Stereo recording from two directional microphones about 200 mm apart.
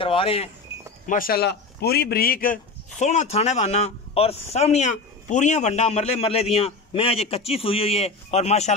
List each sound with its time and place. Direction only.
0.0 s speech: 25° left (ahead or behind)
1.0 s speech: 45° left (ahead or behind)